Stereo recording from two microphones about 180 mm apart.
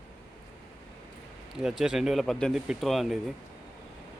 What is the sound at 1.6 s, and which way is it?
Speech, centre (ahead or behind).